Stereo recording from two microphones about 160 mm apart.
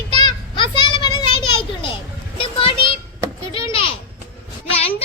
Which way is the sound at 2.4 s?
35° left (ahead or behind).